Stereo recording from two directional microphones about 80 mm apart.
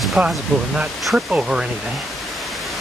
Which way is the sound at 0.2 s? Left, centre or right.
Centre.